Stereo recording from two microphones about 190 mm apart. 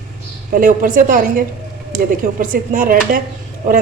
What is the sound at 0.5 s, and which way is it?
A woman's voice, 45° right (ahead or behind).